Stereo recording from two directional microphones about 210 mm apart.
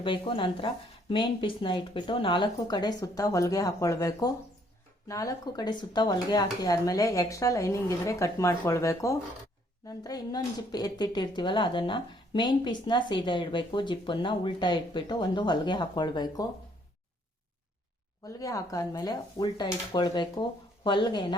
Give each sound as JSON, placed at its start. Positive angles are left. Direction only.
{"t": 0.0, "sound": "a woman's voice", "side_deg": 25}
{"t": 18.3, "sound": "a woman's voice", "side_deg": 15}